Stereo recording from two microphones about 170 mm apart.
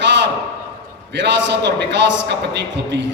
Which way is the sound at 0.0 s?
90° right.